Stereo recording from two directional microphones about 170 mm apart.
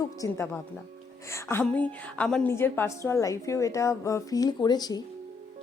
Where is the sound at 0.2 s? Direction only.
15° left (ahead or behind).